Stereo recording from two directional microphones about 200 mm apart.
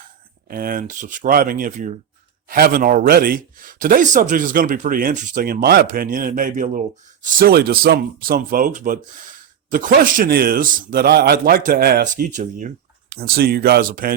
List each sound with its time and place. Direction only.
0.4 s speech: 45° right (ahead or behind)